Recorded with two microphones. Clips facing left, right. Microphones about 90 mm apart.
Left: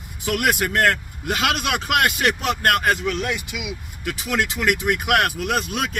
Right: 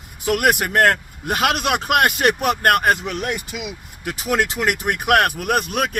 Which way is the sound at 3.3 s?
35° right (ahead or behind).